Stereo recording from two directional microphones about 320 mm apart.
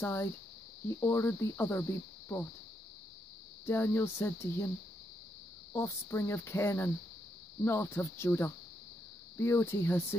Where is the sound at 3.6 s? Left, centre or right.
Centre.